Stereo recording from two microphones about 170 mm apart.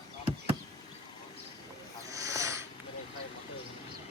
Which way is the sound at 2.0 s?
20° right (ahead or behind).